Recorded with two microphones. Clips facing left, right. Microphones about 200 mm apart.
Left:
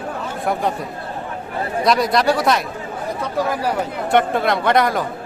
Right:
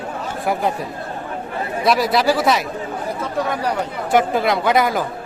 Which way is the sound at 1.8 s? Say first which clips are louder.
Even; 5° right (ahead or behind).